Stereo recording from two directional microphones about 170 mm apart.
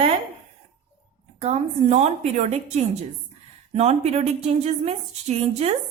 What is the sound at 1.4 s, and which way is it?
Speech, 40° right (ahead or behind).